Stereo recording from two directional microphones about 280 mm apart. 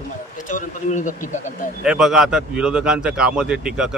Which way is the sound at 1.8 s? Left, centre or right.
Centre.